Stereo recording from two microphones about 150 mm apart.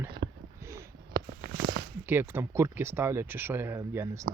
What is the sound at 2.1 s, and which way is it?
Speech, 15° right (ahead or behind).